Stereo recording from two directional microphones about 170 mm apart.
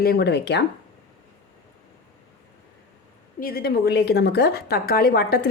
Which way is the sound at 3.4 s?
65° left (ahead or behind).